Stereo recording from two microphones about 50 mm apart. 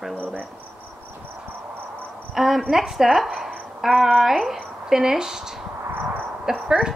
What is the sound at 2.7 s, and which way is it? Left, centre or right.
Speech, centre.